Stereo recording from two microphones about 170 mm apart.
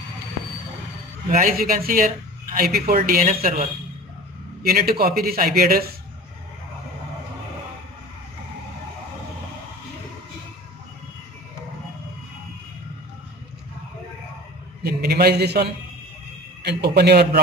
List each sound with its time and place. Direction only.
1.3 s speech: 55° right (ahead or behind)
4.6 s speech: 60° right (ahead or behind)
14.8 s a sound: 65° right (ahead or behind)
16.6 s speech: 75° right (ahead or behind)